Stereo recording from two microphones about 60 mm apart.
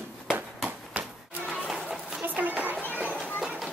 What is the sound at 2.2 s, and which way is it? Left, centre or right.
Children playing, right.